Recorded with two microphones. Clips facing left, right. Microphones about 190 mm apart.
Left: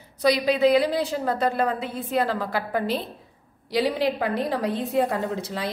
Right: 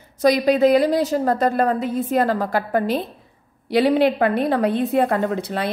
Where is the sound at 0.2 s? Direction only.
45° right (ahead or behind).